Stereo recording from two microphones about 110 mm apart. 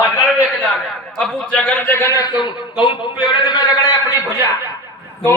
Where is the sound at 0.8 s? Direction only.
Centre (ahead or behind); by 4.0 s 40° left (ahead or behind).